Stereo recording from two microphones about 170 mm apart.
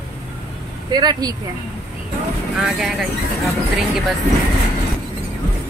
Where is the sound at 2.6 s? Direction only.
Centre (ahead or behind).